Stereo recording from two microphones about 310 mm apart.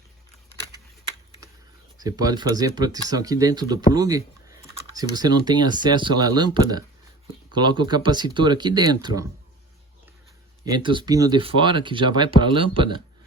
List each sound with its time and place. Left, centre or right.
2.0 s speech: centre
10.7 s speech: centre